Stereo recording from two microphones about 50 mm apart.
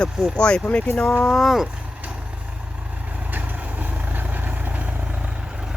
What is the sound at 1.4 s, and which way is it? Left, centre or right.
Speech, centre.